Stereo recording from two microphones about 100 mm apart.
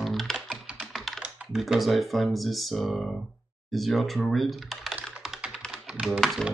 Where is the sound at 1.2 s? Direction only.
5° right (ahead or behind).